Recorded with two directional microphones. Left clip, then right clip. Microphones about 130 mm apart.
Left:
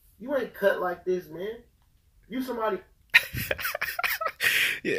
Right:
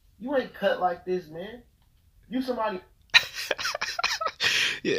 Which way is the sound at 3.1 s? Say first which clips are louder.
Right 1 dB; 30° right (ahead or behind).